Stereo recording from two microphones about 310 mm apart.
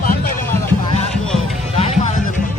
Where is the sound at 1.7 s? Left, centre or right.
Left.